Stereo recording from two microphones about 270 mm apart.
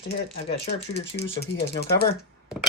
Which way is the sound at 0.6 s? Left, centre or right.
Left.